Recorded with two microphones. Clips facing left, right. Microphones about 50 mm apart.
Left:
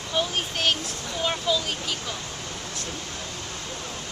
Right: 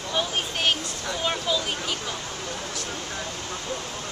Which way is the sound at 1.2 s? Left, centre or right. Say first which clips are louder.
Left 1 dB; centre.